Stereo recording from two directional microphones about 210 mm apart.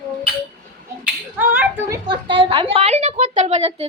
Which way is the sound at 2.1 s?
25° right (ahead or behind).